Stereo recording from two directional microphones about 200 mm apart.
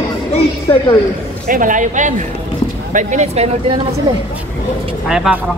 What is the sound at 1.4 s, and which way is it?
Speech, 40° right (ahead or behind).